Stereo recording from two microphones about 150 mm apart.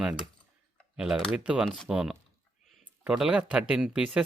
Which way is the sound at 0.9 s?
Centre (ahead or behind).